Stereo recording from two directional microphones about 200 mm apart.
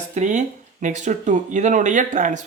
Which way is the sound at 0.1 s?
35° right (ahead or behind).